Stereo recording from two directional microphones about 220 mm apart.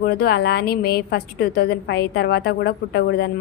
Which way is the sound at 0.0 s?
45° left (ahead or behind).